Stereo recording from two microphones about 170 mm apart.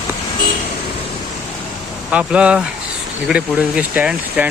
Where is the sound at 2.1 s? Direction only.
5° right (ahead or behind).